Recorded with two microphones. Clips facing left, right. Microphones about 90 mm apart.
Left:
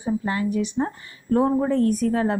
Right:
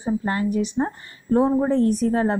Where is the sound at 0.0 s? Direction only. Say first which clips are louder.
Right 1 dB; 35° right (ahead or behind).